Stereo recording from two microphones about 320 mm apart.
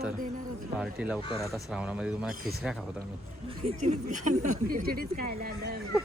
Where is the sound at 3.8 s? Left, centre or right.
Right.